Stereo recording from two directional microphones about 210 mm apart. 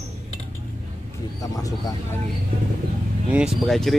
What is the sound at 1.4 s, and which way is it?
Speech, 15° left (ahead or behind).